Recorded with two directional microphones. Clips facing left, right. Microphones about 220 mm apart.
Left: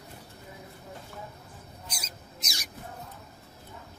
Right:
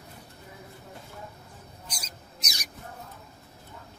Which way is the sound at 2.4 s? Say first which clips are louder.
Even; 20° right (ahead or behind).